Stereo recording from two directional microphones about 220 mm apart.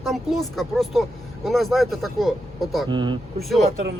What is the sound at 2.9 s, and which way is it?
Speech, 20° right (ahead or behind).